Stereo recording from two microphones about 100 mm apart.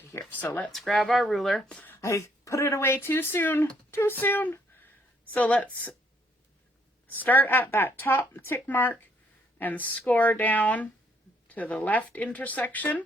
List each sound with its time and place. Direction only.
0.3 s speech: 15° left (ahead or behind)
0.7 s speech: centre (ahead or behind)
1.7 s a sound: 20° left (ahead or behind)
2.0 s speech: 30° left (ahead or behind); by 5.9 s 15° left (ahead or behind)
7.1 s speech: 20° left (ahead or behind)